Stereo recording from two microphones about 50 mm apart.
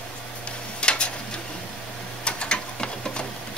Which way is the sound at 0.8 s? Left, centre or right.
Centre.